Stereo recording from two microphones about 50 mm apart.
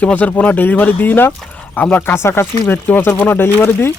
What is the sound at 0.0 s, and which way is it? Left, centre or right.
Speech, left.